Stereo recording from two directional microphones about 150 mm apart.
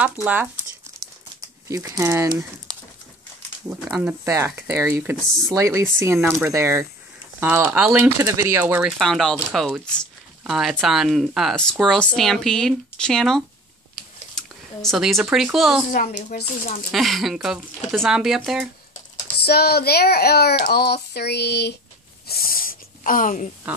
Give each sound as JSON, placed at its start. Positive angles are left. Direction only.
{"t": 0.0, "sound": "speech", "side_deg": -10}
{"t": 1.7, "sound": "speech", "side_deg": -20}
{"t": 3.9, "sound": "speech", "side_deg": -15}
{"t": 8.8, "sound": "speech", "side_deg": 0}
{"t": 15.9, "sound": "a woman's voice", "side_deg": 65}
{"t": 16.9, "sound": "speech", "side_deg": 0}
{"t": 19.2, "sound": "a child's voice", "side_deg": 90}
{"t": 22.2, "sound": "a sound", "side_deg": 90}